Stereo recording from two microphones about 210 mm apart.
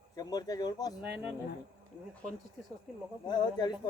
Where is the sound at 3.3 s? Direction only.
20° left (ahead or behind).